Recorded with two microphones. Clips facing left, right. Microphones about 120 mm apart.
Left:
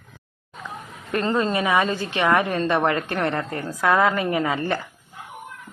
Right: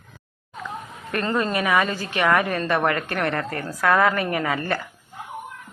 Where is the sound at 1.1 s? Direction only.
25° left (ahead or behind).